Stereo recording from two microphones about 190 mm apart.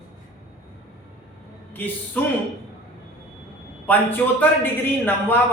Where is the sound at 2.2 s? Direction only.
10° left (ahead or behind).